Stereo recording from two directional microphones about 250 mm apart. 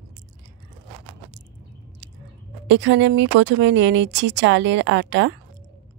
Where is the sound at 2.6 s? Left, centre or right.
Right.